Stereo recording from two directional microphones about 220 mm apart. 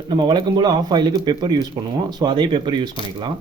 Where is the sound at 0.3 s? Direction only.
20° right (ahead or behind).